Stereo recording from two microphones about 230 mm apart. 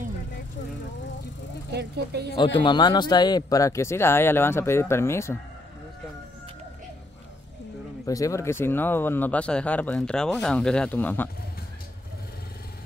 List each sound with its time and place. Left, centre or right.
1.7 s speech: right
2.3 s speech: left
8.0 s speech: centre